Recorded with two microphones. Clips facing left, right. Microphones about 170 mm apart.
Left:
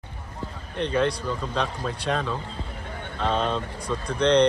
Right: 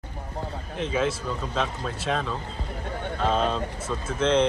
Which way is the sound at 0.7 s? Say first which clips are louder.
Left 2 dB; 5° right (ahead or behind).